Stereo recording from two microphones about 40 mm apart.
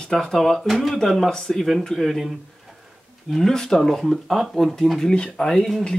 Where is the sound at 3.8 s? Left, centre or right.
Centre.